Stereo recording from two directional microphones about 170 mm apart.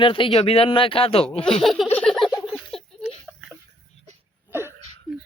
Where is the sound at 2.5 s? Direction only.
Centre (ahead or behind).